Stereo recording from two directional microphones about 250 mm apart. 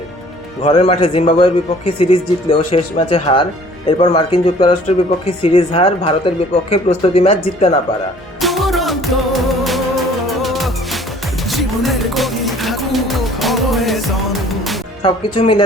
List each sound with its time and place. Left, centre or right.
0.6 s speech: left
8.4 s music: centre
15.0 s speech: centre